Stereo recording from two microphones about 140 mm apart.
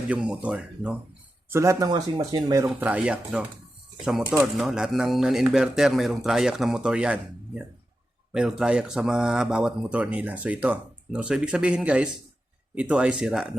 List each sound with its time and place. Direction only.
0.1 s speech: 10° right (ahead or behind)
1.5 s speech: 20° right (ahead or behind)
2.6 s a man's voice: 10° right (ahead or behind)